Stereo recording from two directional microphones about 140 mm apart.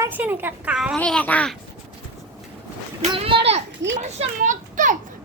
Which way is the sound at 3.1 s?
40° right (ahead or behind).